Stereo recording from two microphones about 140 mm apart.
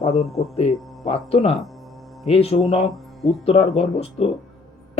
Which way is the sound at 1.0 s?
45° left (ahead or behind).